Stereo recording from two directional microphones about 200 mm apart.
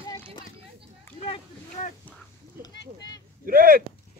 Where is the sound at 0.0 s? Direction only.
15° left (ahead or behind).